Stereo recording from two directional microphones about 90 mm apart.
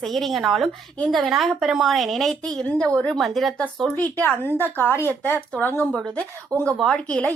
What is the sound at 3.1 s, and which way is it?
Speech, centre (ahead or behind).